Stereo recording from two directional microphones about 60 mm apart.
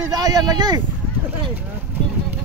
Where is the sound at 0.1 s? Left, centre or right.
Right.